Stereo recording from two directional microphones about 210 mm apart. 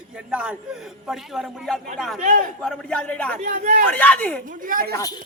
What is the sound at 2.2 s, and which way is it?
Speech, 35° right (ahead or behind).